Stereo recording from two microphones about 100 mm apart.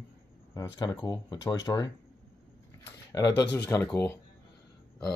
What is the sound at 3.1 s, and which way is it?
Speech, 35° left (ahead or behind).